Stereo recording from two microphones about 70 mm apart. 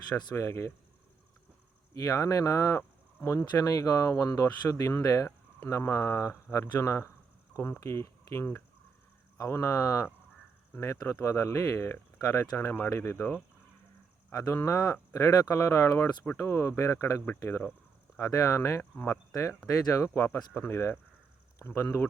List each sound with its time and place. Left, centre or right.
0.3 s speech: left
1.9 s speech: left
9.4 s speech: left
12.5 s speech: left
14.3 s speech: left
18.8 s speech: left
19.9 s speech: left
20.2 s speech: left